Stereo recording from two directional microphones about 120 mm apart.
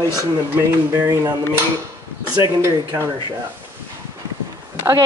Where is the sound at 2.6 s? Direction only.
25° right (ahead or behind).